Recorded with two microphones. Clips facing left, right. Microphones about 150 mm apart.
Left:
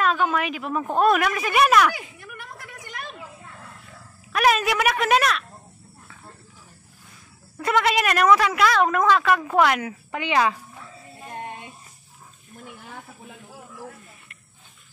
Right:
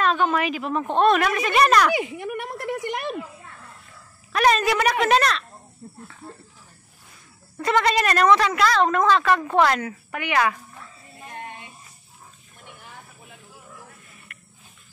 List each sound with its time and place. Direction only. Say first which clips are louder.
0.0 s a woman's voice: right 1 dB; 5° left (ahead or behind)
2.0 s a sound: right 12 dB; 65° right (ahead or behind)
4.3 s a woman's voice: right 1 dB; 5° left (ahead or behind)
6.2 s cricket: right 6 dB; 25° right (ahead or behind)
7.5 s a woman's voice: right 1 dB; 5° left (ahead or behind)